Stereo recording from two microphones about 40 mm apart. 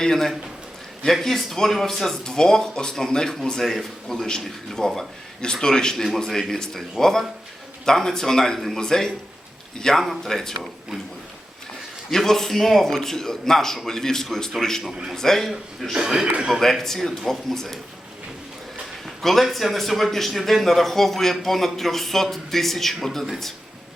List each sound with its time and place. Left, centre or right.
0.0 s a man's voice: centre
3.6 s a man's voice: centre
9.9 s a man's voice: centre
12.1 s a man's voice: centre
15.9 s a man's voice: centre
16.5 s a man's voice: centre
19.2 s a man's voice: centre